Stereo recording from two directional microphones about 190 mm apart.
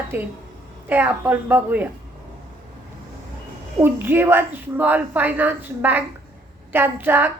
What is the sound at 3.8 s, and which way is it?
A woman's voice, 10° right (ahead or behind).